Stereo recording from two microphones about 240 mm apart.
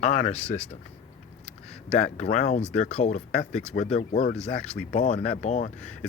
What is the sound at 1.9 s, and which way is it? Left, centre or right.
Speech, left.